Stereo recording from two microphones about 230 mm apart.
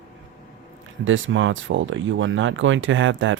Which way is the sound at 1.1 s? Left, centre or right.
Right.